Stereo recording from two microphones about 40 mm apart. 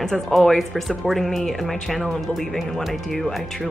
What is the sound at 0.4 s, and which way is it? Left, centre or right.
Speech, centre.